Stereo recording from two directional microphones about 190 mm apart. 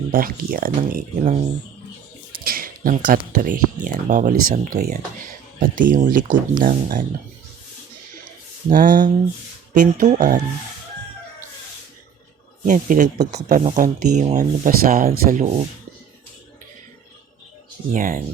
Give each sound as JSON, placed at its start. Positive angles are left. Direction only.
{"t": 0.1, "sound": "speech", "side_deg": -50}
{"t": 2.4, "sound": "a sound", "side_deg": -50}
{"t": 3.3, "sound": "speech", "side_deg": -45}
{"t": 8.7, "sound": "speech", "side_deg": -45}
{"t": 12.6, "sound": "speech", "side_deg": -40}
{"t": 17.9, "sound": "speech", "side_deg": -45}